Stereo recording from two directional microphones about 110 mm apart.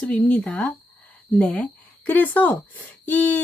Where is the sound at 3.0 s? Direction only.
15° left (ahead or behind).